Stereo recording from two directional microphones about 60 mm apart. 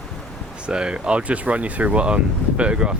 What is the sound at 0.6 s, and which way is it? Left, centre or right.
Speech, centre.